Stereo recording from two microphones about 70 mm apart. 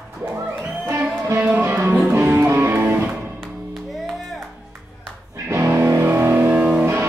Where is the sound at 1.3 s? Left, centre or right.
Right.